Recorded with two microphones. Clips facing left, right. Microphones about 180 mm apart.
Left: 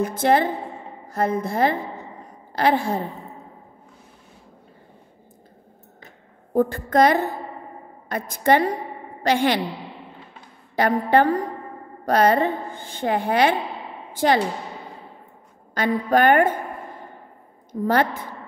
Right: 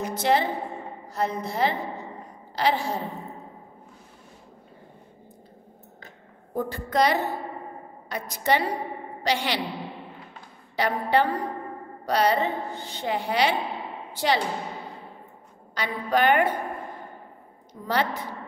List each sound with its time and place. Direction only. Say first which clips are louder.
0.0 s a woman's voice: left 4 dB; 50° left (ahead or behind)
6.5 s a woman's voice: left 7 dB; 50° left (ahead or behind)
10.8 s a woman's voice: left 5 dB; 50° left (ahead or behind)
15.7 s a woman's voice: left 6 dB; 50° left (ahead or behind)
17.8 s a woman's voice: left 5 dB; 50° left (ahead or behind)